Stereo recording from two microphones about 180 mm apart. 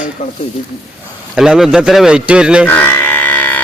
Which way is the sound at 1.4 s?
5° right (ahead or behind).